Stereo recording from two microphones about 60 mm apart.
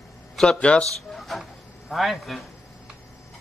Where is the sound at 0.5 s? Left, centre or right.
Centre.